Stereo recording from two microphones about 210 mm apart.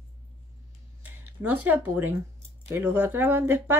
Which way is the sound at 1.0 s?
10° right (ahead or behind).